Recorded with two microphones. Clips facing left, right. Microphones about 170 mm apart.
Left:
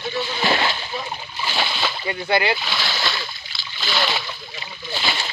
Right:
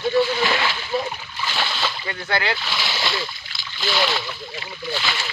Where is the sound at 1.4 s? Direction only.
20° left (ahead or behind).